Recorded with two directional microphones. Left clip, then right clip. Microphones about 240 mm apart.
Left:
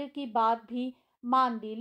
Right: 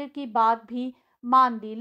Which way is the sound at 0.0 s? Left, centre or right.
Right.